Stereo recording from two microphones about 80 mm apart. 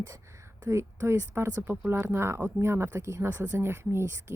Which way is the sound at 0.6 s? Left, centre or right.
Right.